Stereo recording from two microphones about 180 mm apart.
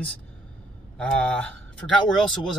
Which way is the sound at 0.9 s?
5° left (ahead or behind).